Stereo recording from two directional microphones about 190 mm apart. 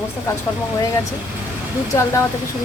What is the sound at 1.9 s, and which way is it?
Speech, 15° left (ahead or behind).